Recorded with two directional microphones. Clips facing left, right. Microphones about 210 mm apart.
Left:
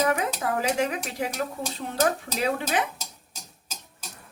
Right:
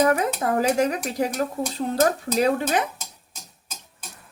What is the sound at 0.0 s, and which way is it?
Speech, 40° right (ahead or behind).